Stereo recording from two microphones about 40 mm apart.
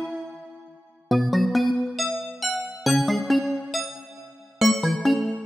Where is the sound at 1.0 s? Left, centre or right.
Centre.